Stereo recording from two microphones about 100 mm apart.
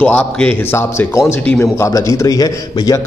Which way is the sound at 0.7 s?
25° left (ahead or behind).